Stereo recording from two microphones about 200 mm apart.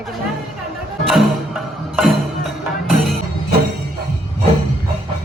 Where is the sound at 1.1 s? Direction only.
Centre (ahead or behind).